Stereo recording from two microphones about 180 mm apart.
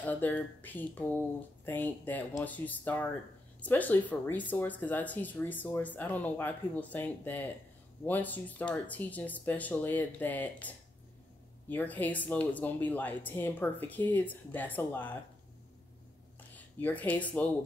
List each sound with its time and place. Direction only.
0.0 s speech: 10° left (ahead or behind)
11.7 s speech: 10° left (ahead or behind)
16.8 s speech: 10° left (ahead or behind)